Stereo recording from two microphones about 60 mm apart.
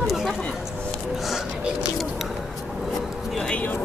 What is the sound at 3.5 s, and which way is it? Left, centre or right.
Speech, left.